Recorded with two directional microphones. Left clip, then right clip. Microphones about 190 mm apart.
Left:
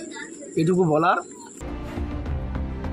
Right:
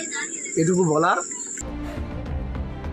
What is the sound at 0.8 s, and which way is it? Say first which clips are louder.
Speech: left 1 dB; 10° left (ahead or behind).